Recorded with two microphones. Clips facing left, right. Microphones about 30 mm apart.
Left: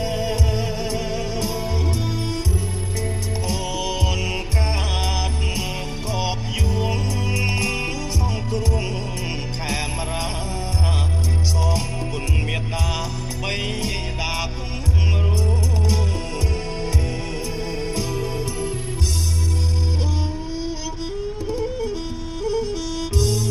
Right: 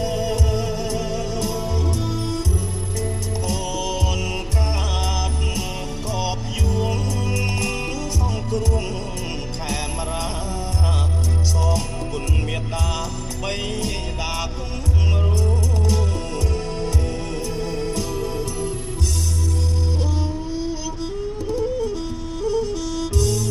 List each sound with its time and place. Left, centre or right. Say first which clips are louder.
0.0 s music: right 1 dB; centre
3.4 s music: even; centre
6.1 s music: left 1 dB; centre
13.5 s music: even; centre
21.5 s music: right 3 dB; centre